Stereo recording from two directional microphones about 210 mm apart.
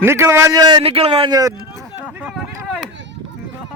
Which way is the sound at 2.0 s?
5° right (ahead or behind).